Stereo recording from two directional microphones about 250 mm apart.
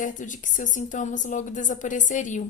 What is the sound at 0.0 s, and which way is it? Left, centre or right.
A woman's voice, left.